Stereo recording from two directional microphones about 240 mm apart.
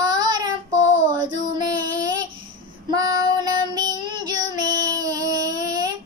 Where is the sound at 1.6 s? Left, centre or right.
Centre.